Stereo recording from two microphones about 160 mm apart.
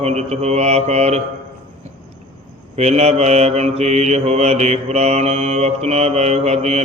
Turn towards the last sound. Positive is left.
turn(degrees=-45)  # may be behind; listen again after turning